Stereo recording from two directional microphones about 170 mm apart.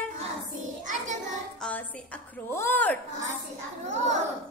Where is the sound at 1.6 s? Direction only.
10° left (ahead or behind).